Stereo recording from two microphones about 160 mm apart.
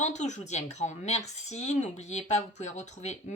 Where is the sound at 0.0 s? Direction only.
45° left (ahead or behind).